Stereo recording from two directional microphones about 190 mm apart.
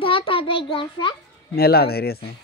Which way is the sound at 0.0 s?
30° left (ahead or behind).